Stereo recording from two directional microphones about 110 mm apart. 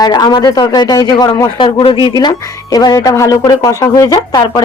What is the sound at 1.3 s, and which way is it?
A man's voice, 50° left (ahead or behind).